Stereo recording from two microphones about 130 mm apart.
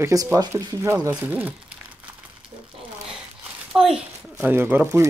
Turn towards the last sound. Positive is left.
turn(degrees=-15)  # may be behind; listen again after turning